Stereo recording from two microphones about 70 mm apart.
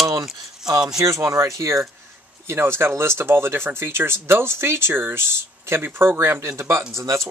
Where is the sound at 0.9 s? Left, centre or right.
Right.